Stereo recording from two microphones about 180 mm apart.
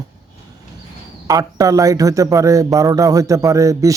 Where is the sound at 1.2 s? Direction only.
20° right (ahead or behind).